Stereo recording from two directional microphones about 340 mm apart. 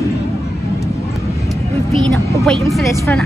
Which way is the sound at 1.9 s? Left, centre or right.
Centre.